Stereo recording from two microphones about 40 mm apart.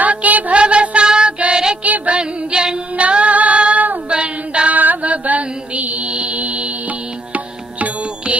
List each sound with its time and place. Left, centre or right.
0.0 s music: right
0.5 s music: right
1.8 s music: right
2.1 s music: right
2.9 s female singing: right
4.1 s singing: right
4.7 s mantra: right
7.3 s music: right